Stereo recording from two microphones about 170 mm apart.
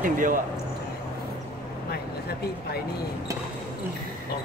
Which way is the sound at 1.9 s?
70° left (ahead or behind).